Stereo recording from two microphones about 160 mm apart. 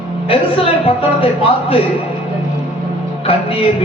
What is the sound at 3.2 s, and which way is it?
Music, 35° left (ahead or behind).